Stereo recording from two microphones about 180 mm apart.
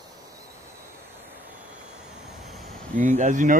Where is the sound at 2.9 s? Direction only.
45° right (ahead or behind).